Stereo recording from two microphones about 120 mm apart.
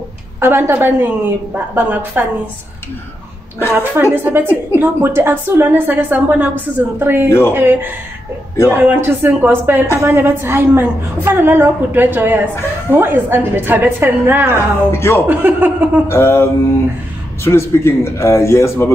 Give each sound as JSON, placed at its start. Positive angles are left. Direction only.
{"t": 0.4, "sound": "a woman's voice", "side_deg": -20}
{"t": 3.7, "sound": "a woman's voice", "side_deg": -15}
{"t": 7.2, "sound": "a man's voice", "side_deg": 20}
{"t": 7.5, "sound": "a woman's voice", "side_deg": -20}
{"t": 14.9, "sound": "a man's voice", "side_deg": 20}
{"t": 15.2, "sound": "a woman's voice", "side_deg": -15}
{"t": 16.1, "sound": "a man's voice", "side_deg": 20}